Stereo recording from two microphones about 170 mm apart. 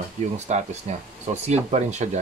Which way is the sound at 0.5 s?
45° right (ahead or behind).